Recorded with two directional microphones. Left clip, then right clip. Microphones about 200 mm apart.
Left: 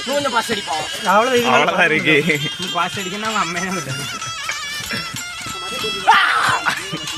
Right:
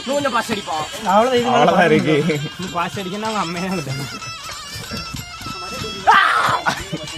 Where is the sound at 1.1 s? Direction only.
40° left (ahead or behind).